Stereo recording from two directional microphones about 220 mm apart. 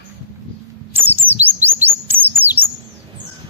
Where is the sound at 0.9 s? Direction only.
10° right (ahead or behind).